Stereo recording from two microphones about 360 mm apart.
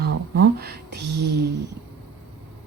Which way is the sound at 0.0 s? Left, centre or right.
Right.